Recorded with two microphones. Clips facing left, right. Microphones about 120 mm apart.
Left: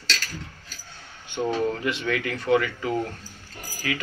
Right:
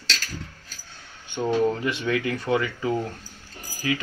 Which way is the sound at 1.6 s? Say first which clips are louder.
Right 2 dB; 25° right (ahead or behind).